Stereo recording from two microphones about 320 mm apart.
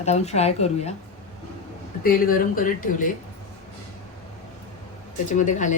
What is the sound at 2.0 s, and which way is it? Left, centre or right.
Speech, left.